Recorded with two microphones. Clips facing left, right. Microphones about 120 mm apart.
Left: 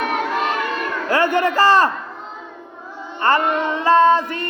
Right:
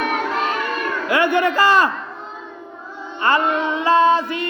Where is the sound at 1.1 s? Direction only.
40° left (ahead or behind).